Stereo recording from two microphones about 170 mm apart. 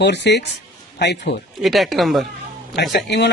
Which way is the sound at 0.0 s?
90° left.